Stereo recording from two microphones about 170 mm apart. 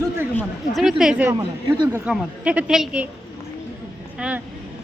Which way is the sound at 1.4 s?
25° right (ahead or behind).